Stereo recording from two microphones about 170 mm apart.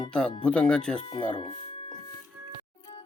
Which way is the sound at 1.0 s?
25° left (ahead or behind).